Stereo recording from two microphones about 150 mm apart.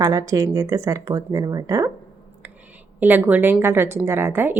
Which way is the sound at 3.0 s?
10° right (ahead or behind).